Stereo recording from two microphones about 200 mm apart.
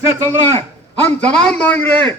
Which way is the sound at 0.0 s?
15° right (ahead or behind).